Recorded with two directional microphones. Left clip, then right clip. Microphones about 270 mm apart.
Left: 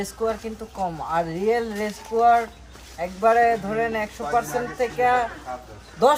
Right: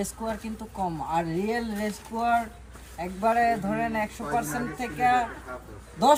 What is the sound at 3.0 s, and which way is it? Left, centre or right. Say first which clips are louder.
A woman's voice: left 6 dB; centre.